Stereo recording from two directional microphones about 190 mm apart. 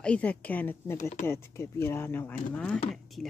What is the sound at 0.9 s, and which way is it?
Speech, 40° left (ahead or behind).